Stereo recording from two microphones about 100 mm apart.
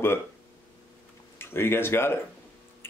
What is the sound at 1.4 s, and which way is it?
Speech, 25° left (ahead or behind).